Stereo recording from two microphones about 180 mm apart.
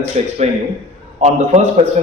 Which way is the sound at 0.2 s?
35° right (ahead or behind).